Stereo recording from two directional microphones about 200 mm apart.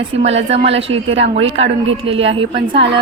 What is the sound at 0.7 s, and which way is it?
A woman's voice, 30° right (ahead or behind).